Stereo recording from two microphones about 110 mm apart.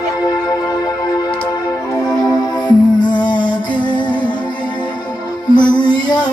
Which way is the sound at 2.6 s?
45° left (ahead or behind).